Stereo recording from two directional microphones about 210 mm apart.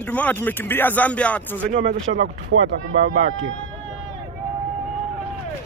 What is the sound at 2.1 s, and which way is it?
Speech, 60° right (ahead or behind).